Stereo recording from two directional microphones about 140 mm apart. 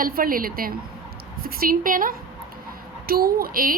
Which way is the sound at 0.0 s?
90° right.